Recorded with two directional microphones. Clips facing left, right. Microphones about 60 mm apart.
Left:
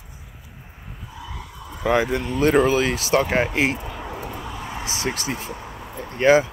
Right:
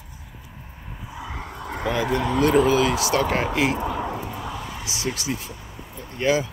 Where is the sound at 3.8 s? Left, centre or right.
Right.